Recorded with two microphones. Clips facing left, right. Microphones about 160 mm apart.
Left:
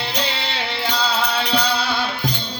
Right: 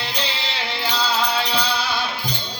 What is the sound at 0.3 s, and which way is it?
Music, 60° left (ahead or behind).